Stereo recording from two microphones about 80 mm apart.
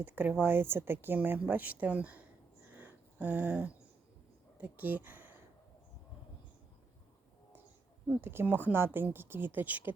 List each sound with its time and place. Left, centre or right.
0.0 s speech: right
2.7 s a sound: right
4.5 s speech: right
8.0 s speech: centre